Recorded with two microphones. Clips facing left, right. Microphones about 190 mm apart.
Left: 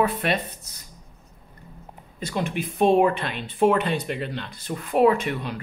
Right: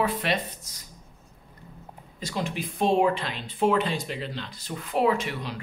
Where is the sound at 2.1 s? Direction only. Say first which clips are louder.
Left 3 dB; 55° left (ahead or behind).